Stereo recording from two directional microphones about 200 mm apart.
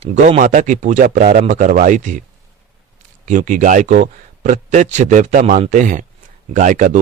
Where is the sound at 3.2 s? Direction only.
40° right (ahead or behind).